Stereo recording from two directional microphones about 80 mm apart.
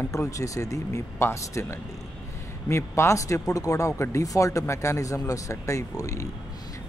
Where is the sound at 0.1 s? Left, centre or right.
Left.